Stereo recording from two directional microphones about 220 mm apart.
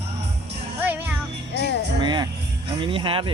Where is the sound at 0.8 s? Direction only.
10° right (ahead or behind).